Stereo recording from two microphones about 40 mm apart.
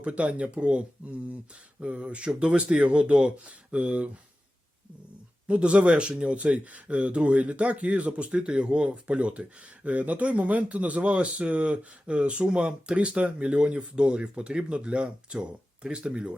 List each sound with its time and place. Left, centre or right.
0.0 s speech: right
5.5 s speech: right